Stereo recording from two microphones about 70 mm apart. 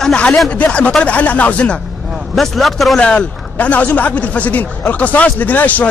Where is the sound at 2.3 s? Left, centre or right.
Centre.